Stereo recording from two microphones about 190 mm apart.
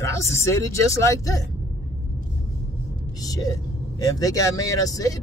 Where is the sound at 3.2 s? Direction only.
20° left (ahead or behind).